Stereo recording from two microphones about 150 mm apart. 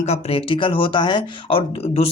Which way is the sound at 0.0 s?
45° left (ahead or behind).